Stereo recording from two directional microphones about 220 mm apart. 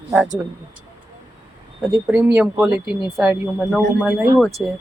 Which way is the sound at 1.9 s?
10° right (ahead or behind).